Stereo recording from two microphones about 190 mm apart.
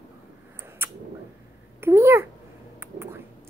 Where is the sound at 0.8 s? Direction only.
10° right (ahead or behind).